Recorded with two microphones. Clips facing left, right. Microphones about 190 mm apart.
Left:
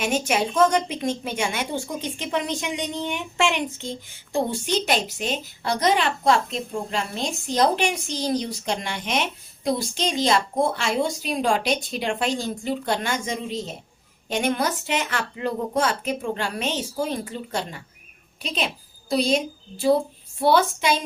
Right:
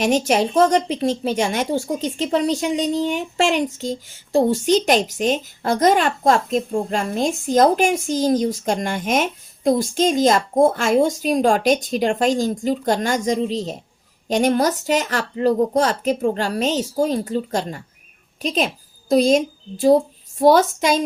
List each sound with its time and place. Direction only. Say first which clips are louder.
0.0 s a woman's voice: right 6 dB; 40° right (ahead or behind)
20.4 s a woman's voice: right 5 dB; 45° right (ahead or behind)